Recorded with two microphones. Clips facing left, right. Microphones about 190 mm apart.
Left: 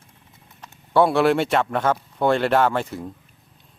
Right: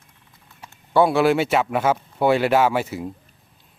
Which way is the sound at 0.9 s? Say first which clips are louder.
Even; centre (ahead or behind).